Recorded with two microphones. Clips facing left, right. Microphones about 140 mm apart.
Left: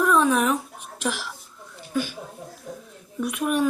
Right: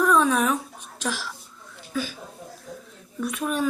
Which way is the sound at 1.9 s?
5° left (ahead or behind).